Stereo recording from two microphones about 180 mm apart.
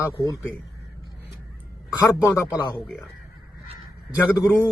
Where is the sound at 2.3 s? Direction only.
20° left (ahead or behind).